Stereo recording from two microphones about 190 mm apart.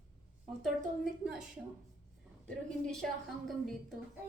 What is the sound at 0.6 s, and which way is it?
Speech, centre (ahead or behind).